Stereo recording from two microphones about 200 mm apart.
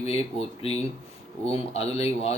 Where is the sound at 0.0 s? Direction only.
30° left (ahead or behind).